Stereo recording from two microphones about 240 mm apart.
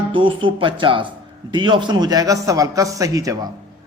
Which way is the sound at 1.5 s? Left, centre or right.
Centre.